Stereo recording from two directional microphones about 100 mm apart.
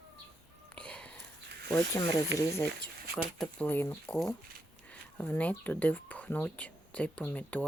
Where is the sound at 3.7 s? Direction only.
20° left (ahead or behind).